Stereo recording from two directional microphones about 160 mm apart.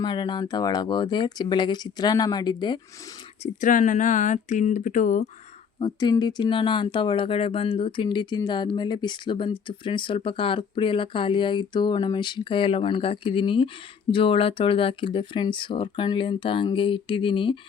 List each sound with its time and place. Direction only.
0.0 s speech: 30° left (ahead or behind)
3.4 s speech: 55° left (ahead or behind)
5.8 s speech: 25° left (ahead or behind)